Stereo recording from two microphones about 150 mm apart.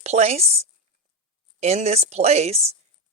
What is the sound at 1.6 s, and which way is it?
Speech, 45° right (ahead or behind).